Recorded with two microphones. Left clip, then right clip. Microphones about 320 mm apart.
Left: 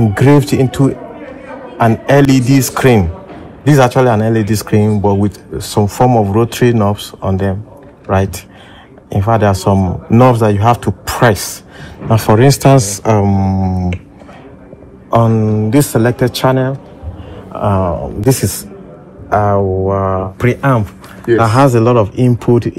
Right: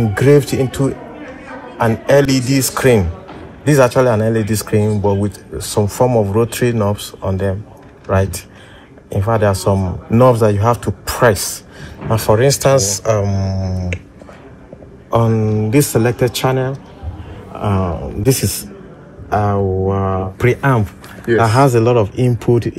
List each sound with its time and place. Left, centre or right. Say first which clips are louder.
0.2 s a man's voice: left 1 dB; centre
9.1 s a man's voice: left 3 dB; left
15.0 s speech: left 3 dB; centre